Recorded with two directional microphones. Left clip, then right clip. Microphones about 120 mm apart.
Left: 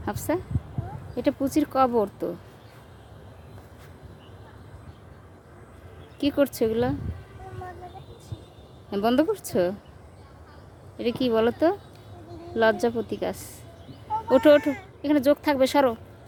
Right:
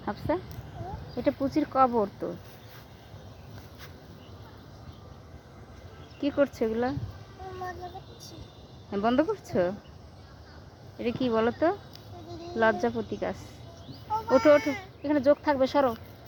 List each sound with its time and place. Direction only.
0.0 s speech: 35° left (ahead or behind)
6.1 s speech: 50° left (ahead or behind)
8.9 s speech: 45° left (ahead or behind)
10.9 s speech: 45° left (ahead or behind)
14.3 s speech: 50° left (ahead or behind)